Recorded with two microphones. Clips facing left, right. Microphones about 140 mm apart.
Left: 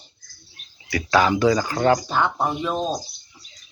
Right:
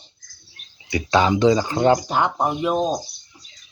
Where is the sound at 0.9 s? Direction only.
25° right (ahead or behind).